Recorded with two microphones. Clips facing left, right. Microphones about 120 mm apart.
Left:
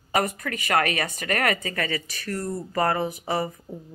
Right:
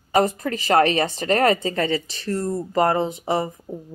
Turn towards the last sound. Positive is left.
turn(degrees=-20)  # may be behind; listen again after turning